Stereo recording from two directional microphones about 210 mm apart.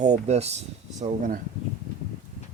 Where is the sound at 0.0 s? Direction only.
30° right (ahead or behind).